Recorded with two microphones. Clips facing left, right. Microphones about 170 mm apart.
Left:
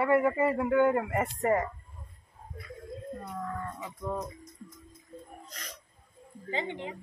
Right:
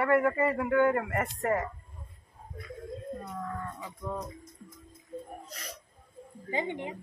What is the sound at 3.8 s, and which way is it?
Speech, 10° left (ahead or behind).